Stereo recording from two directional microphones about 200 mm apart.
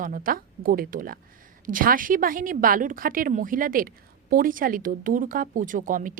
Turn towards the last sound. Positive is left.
turn(degrees=-40)  # may be behind; listen again after turning